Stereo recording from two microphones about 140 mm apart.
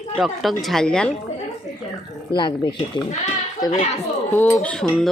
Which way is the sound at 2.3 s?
35° left (ahead or behind).